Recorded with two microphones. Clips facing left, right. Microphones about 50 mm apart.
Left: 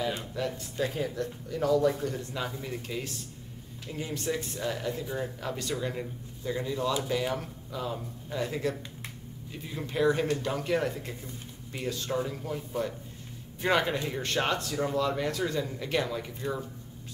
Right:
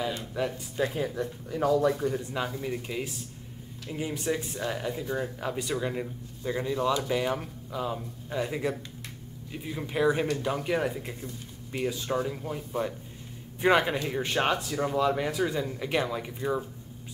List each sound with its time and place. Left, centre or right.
0.4 s speech: centre